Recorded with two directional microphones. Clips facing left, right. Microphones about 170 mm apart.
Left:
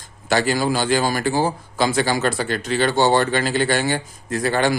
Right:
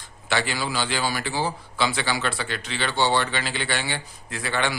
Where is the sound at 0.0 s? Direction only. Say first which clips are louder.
Left 7 dB; 40° left (ahead or behind).